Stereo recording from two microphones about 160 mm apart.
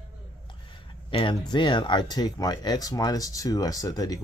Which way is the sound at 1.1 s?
30° left (ahead or behind).